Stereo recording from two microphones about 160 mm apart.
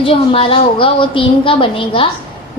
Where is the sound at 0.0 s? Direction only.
35° left (ahead or behind).